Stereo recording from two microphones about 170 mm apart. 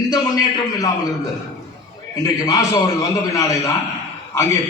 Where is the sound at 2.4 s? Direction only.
20° left (ahead or behind).